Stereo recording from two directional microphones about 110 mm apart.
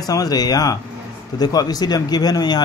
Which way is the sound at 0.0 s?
35° left (ahead or behind).